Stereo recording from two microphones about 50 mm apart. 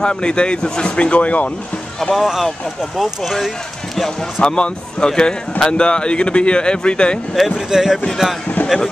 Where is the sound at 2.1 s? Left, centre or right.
Centre.